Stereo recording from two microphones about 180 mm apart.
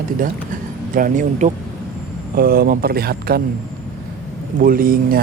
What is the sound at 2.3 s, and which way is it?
Speech, 55° right (ahead or behind).